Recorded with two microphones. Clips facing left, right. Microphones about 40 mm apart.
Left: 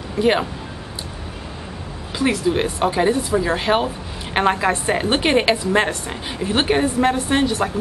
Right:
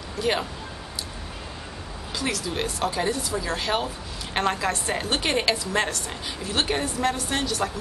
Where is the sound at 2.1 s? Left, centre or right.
Left.